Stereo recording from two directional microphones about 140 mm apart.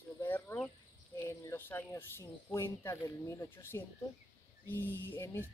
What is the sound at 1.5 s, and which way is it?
Speech, 15° left (ahead or behind).